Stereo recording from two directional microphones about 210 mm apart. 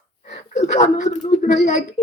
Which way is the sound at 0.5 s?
30° left (ahead or behind).